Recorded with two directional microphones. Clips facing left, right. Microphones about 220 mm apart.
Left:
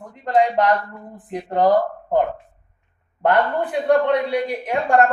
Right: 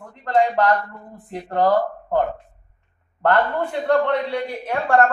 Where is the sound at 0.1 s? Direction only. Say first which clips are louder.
Left 1 dB; 20° left (ahead or behind).